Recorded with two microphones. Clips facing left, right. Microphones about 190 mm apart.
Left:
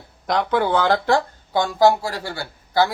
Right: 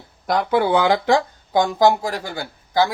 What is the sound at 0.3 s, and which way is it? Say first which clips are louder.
Speech: right 2 dB; 5° right (ahead or behind).